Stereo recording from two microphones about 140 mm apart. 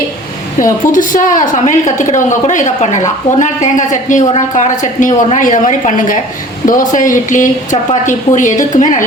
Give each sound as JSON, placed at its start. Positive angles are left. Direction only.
{"t": 0.6, "sound": "speech", "side_deg": 70}